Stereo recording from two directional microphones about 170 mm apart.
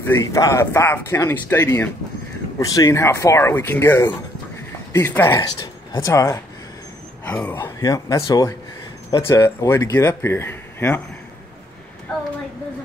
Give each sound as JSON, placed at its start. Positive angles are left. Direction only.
{"t": 0.0, "sound": "speech", "side_deg": 20}